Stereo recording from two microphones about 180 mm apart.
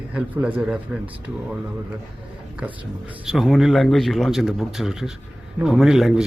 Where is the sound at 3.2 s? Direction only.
Centre (ahead or behind).